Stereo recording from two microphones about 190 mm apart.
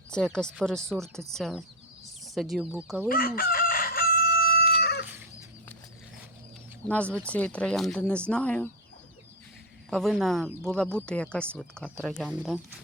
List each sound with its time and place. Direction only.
0.1 s speech: 5° left (ahead or behind)
3.1 s chicken: 50° left (ahead or behind)
6.8 s speech: 5° left (ahead or behind)
9.9 s speech: centre (ahead or behind)